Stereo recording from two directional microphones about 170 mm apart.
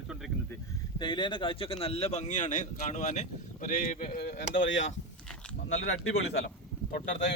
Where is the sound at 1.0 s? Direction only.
25° left (ahead or behind); by 4.4 s 45° left (ahead or behind).